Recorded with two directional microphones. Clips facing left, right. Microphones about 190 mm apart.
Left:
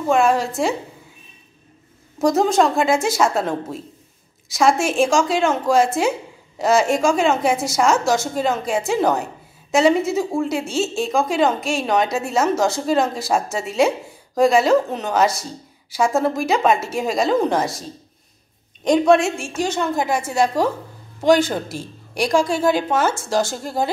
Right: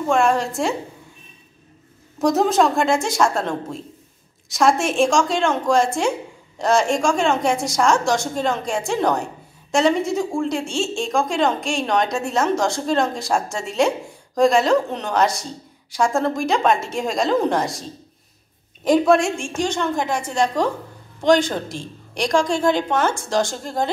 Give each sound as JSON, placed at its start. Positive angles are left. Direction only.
{"t": 0.0, "sound": "a woman's voice", "side_deg": 5}
{"t": 2.1, "sound": "a woman's voice", "side_deg": 0}
{"t": 18.9, "sound": "a woman's voice", "side_deg": 0}